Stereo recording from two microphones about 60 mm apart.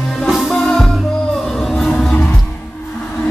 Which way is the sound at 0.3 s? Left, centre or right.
Centre.